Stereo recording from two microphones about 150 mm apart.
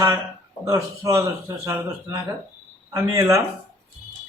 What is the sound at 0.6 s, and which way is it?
Speech, 20° right (ahead or behind).